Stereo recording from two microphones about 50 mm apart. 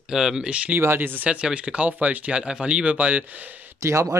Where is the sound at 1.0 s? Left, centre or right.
Right.